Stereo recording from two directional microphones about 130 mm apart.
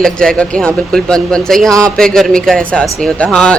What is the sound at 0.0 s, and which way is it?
A man's voice, 5° left (ahead or behind).